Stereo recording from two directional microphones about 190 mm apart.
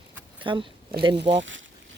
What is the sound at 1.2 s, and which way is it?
Speech, 70° right (ahead or behind).